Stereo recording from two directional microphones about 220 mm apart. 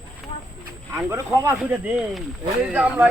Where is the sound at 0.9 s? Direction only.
10° right (ahead or behind).